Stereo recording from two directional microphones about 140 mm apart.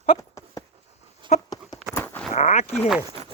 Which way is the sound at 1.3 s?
55° left (ahead or behind).